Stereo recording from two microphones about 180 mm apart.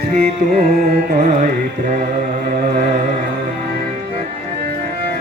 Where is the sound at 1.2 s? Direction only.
40° right (ahead or behind).